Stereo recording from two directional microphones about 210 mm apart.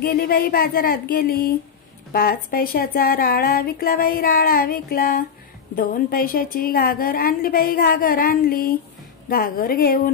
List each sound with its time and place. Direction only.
0.0 s speech: 45° left (ahead or behind)